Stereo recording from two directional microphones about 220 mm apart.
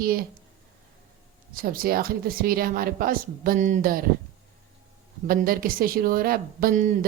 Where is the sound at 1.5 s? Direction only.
40° right (ahead or behind).